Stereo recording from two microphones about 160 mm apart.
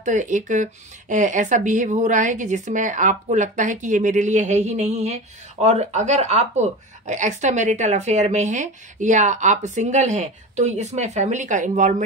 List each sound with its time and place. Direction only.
0.0 s speech: 50° right (ahead or behind)